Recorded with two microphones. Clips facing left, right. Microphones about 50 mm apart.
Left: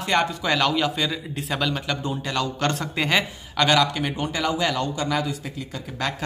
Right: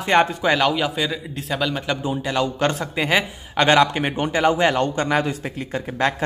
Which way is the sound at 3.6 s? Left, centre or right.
Right.